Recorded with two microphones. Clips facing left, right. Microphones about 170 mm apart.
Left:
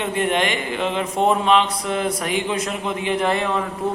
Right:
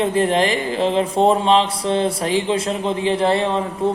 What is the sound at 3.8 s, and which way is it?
Speech, 30° right (ahead or behind).